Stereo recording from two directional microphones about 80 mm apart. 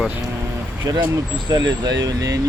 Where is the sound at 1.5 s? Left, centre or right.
Right.